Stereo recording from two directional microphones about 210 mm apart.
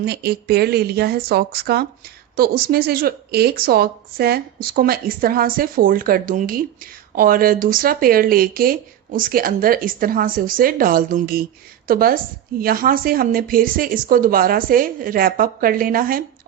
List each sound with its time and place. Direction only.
0.0 s speech: 50° right (ahead or behind)